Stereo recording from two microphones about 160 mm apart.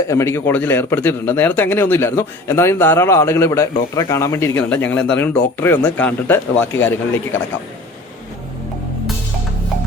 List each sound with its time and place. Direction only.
0.1 s speech: 20° left (ahead or behind)